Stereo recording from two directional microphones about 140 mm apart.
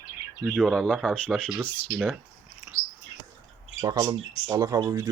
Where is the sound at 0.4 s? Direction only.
Centre (ahead or behind).